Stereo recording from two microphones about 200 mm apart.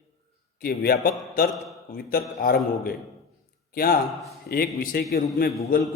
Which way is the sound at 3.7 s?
45° left (ahead or behind).